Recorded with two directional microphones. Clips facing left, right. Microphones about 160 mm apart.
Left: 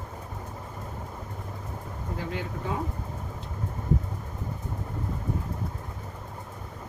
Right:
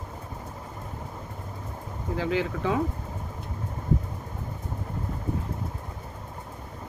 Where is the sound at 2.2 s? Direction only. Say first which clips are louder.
Right 8 dB; 90° right.